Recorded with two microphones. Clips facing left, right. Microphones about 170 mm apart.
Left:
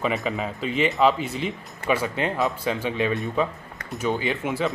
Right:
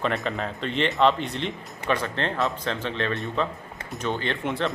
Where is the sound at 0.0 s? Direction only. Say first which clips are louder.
Left 1 dB; 5° left (ahead or behind).